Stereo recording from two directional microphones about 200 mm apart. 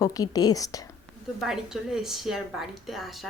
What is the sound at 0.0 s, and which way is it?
Speech, 20° left (ahead or behind).